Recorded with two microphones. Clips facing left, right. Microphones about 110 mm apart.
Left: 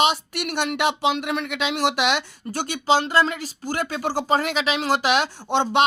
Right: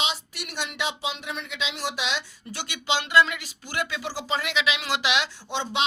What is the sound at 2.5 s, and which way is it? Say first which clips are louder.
Speech: left 8 dB; 45° left (ahead or behind).